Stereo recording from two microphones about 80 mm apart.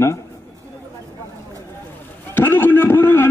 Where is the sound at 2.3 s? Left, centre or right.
Left.